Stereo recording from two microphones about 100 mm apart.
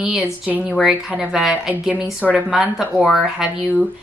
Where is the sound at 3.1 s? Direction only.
Centre (ahead or behind).